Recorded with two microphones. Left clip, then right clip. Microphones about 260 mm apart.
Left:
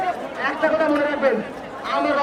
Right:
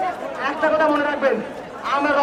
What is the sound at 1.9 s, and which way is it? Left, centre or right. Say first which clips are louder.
Speech: right 1 dB; centre.